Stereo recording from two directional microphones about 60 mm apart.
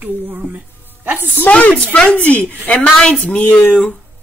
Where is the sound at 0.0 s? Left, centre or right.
Right.